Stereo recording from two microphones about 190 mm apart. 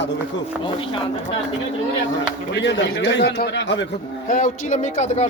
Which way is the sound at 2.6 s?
70° left (ahead or behind).